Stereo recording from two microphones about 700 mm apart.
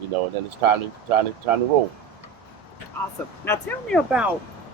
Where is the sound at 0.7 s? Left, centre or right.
Right.